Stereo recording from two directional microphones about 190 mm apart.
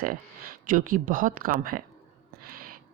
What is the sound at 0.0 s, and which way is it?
Speech, 50° right (ahead or behind).